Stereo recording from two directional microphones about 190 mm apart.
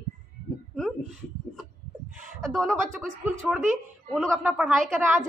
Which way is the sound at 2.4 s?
Centre (ahead or behind).